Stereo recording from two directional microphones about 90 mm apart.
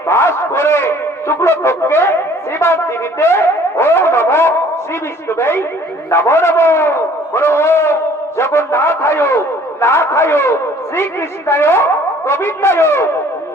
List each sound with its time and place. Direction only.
0.1 s a man's voice: 30° left (ahead or behind)